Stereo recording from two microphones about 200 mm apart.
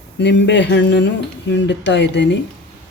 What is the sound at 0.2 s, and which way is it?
Speech, 60° left (ahead or behind).